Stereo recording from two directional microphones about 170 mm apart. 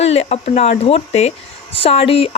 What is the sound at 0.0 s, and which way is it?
Speech, 40° left (ahead or behind).